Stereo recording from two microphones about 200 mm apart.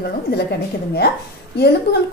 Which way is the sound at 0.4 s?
55° left (ahead or behind).